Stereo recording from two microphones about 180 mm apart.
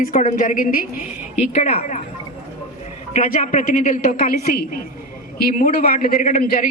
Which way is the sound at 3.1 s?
45° left (ahead or behind).